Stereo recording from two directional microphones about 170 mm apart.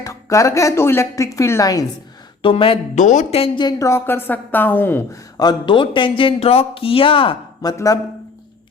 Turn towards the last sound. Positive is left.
turn(degrees=20)  # may be behind; listen again after turning